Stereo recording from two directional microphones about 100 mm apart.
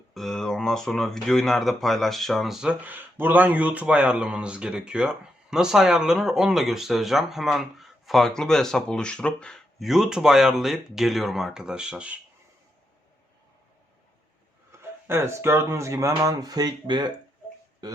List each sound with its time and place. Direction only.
0.1 s speech: centre (ahead or behind)
2.8 s speech: 20° right (ahead or behind)
14.7 s speech: 25° right (ahead or behind)